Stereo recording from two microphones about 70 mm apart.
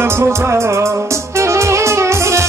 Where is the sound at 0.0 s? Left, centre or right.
Right.